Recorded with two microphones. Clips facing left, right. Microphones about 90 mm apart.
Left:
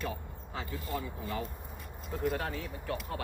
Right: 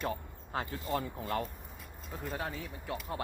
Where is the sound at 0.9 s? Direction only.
60° right (ahead or behind).